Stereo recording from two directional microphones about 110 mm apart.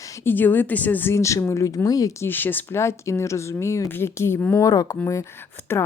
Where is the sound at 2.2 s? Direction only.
15° left (ahead or behind).